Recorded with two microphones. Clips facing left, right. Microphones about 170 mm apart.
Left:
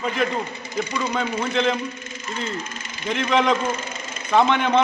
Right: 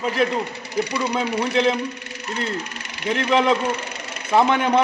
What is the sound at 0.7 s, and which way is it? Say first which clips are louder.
Speech: right 2 dB; 35° right (ahead or behind).